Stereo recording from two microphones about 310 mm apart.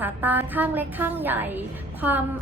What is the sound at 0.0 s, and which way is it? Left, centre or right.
A woman's voice, centre.